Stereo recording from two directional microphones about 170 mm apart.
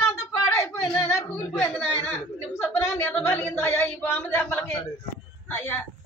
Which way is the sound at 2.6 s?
15° left (ahead or behind).